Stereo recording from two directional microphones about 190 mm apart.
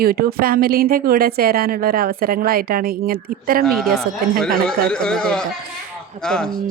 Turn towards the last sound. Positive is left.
turn(degrees=5)  # may be behind; listen again after turning